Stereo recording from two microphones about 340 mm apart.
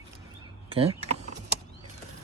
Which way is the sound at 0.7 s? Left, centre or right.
Centre.